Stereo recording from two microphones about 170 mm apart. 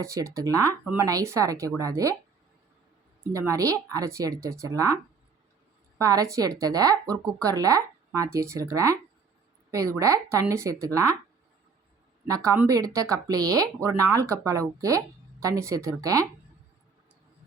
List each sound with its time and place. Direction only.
0.0 s speech: 20° right (ahead or behind)
3.2 s speech: 15° right (ahead or behind)
6.0 s speech: 20° right (ahead or behind)
12.3 s speech: 20° right (ahead or behind)